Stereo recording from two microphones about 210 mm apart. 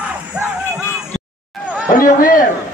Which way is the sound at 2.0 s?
40° left (ahead or behind).